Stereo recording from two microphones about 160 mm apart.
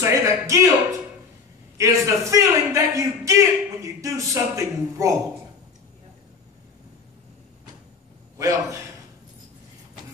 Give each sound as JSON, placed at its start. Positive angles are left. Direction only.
{"t": 0.0, "sound": "a sound", "side_deg": -20}
{"t": 1.8, "sound": "a man's voice", "side_deg": -20}
{"t": 8.4, "sound": "a man's voice", "side_deg": -20}